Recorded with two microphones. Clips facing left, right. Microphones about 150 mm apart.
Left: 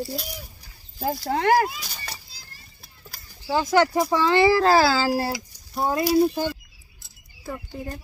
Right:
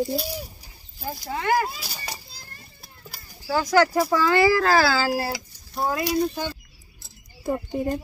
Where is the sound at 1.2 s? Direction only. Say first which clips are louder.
Left 3 dB; 65° left (ahead or behind).